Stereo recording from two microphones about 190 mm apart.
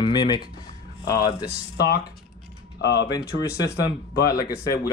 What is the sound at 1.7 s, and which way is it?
Speech, 60° left (ahead or behind).